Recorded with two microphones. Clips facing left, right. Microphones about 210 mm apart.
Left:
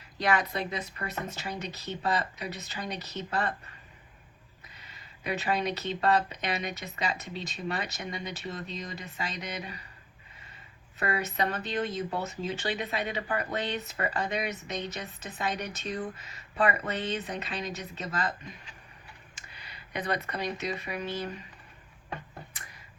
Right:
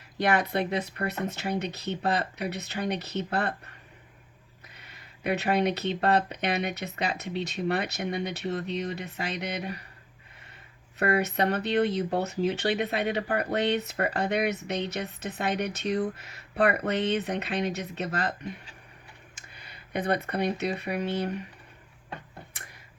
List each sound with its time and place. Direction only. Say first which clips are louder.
0.2 s speech: right 3 dB; 65° right (ahead or behind)
4.8 s speech: right 7 dB; 65° right (ahead or behind)
11.0 s speech: right 5 dB; 65° right (ahead or behind)
19.5 s speech: right 4 dB; 50° right (ahead or behind)